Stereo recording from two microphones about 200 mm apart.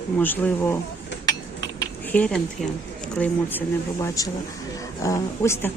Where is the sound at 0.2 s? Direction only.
10° left (ahead or behind).